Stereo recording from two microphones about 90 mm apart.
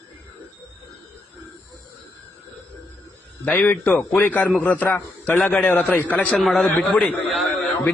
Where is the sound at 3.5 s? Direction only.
20° left (ahead or behind).